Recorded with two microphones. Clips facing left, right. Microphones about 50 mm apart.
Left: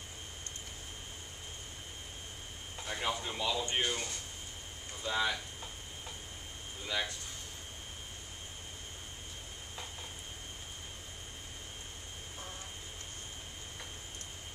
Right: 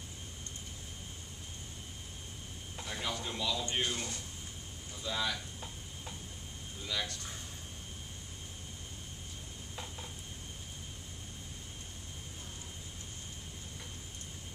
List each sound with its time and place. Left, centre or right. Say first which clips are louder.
2.8 s speech: left 2 dB; centre
5.0 s speech: left 3 dB; left
6.9 s speech: left 2 dB; left